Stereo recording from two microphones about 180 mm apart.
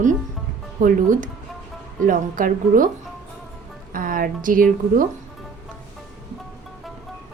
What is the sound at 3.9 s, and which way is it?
A woman's voice, 50° right (ahead or behind).